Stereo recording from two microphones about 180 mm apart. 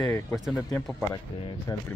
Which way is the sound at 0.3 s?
Centre (ahead or behind).